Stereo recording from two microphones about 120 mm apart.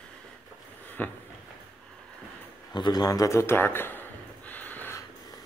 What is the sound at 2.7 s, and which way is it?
A man's voice, 35° left (ahead or behind).